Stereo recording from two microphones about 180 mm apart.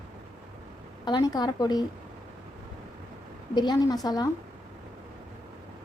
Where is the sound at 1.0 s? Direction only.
20° left (ahead or behind).